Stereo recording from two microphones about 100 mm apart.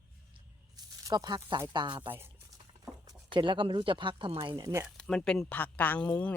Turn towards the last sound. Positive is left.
turn(degrees=15)  # may be behind; listen again after turning